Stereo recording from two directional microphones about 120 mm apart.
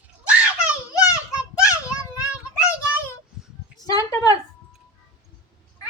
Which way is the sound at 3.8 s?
30° left (ahead or behind).